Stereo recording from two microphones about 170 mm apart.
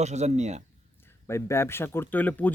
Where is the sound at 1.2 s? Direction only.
15° left (ahead or behind).